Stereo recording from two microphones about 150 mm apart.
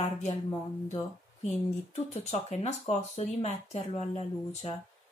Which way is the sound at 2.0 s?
45° left (ahead or behind).